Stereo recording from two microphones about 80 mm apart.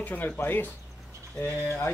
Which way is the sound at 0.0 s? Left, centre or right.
Left.